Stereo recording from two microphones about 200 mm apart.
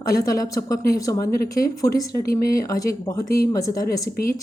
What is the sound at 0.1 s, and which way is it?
Speech, 15° left (ahead or behind).